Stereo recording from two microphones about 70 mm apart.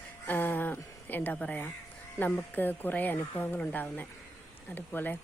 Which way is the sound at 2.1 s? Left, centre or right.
Left.